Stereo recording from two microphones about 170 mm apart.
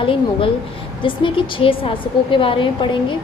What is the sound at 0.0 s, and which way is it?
A woman's voice, 30° left (ahead or behind).